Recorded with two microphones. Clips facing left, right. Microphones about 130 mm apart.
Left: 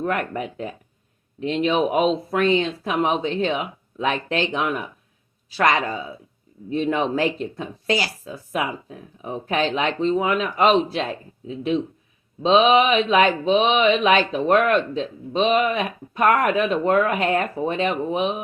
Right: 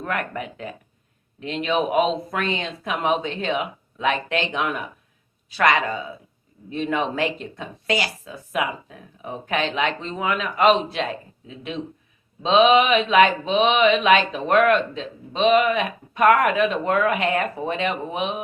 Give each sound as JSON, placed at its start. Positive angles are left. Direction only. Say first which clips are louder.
{"t": 0.0, "sound": "speech", "louder": "left 3 dB", "side_deg": 30}